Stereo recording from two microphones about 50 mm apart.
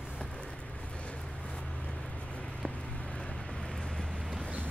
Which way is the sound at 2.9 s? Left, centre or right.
Centre.